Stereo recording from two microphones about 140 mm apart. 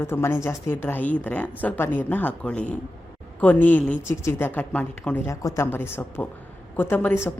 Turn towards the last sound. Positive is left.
turn(degrees=15)  # may be behind; listen again after turning